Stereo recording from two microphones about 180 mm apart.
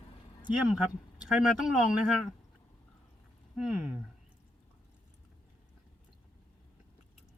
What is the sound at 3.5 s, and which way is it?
Speech, 5° right (ahead or behind).